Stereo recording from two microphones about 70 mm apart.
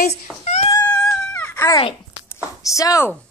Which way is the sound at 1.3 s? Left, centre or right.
Left.